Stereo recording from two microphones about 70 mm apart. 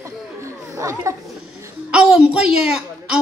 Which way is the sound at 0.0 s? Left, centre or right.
Right.